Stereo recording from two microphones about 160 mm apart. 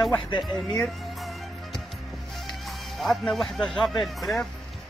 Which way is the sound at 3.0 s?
Centre (ahead or behind).